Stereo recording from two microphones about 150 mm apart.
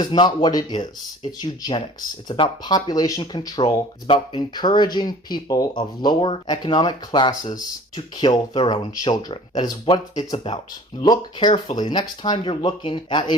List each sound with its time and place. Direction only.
0.0 s speech: 30° left (ahead or behind)